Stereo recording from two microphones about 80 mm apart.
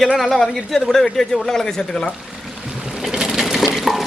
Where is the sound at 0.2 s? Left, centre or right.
Centre.